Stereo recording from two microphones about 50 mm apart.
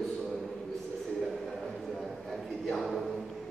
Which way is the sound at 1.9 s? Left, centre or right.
Centre.